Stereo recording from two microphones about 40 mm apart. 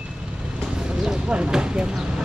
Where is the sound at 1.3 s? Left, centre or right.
Right.